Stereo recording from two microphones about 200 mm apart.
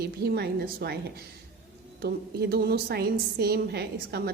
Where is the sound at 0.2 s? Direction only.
55° right (ahead or behind).